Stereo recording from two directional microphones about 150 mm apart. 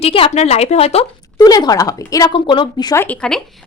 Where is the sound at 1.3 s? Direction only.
25° left (ahead or behind).